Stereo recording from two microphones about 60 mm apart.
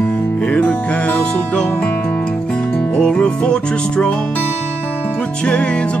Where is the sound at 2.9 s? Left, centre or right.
Centre.